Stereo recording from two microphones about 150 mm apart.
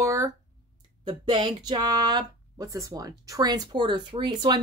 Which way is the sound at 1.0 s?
35° right (ahead or behind).